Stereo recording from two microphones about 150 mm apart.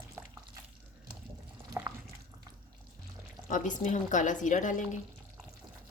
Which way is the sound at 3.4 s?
55° left (ahead or behind).